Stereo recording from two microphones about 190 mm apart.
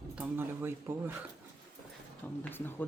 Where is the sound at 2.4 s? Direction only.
10° left (ahead or behind).